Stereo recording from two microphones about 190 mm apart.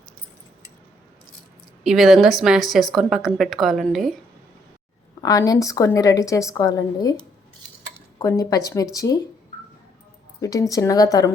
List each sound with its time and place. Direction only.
1.8 s a woman's voice: centre (ahead or behind)
5.2 s a woman's voice: 20° left (ahead or behind)
8.2 s speech: 20° left (ahead or behind)
10.4 s a woman's voice: 20° left (ahead or behind)